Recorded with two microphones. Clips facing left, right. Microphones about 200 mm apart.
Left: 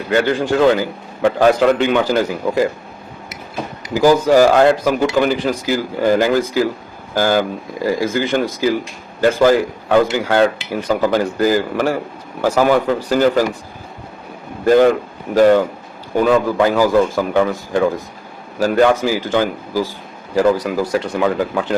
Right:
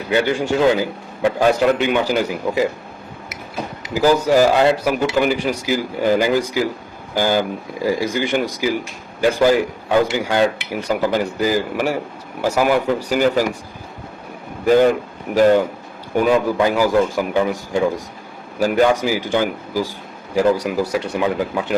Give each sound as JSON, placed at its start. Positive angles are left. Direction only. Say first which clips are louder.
{"t": 0.1, "sound": "a man's voice", "louder": "left 2 dB", "side_deg": -10}
{"t": 4.0, "sound": "speech", "louder": "left 3 dB", "side_deg": 15}
{"t": 4.5, "sound": "a man's voice", "louder": "left 3 dB", "side_deg": -10}
{"t": 14.6, "sound": "a man's voice", "louder": "left 2 dB", "side_deg": -10}